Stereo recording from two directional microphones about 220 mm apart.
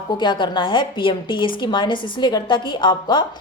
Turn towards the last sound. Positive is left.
turn(degrees=20)  # may be behind; listen again after turning